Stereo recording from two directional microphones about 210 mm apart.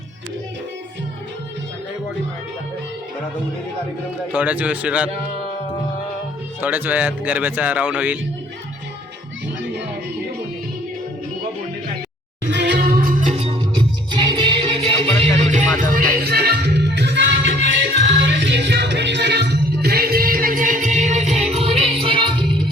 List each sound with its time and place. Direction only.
4.3 s speech: 5° right (ahead or behind)
6.6 s speech: 10° right (ahead or behind)
12.5 s music: 55° right (ahead or behind)
14.1 s music: 20° right (ahead or behind)